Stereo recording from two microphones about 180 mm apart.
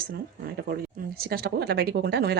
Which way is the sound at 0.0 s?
60° right (ahead or behind).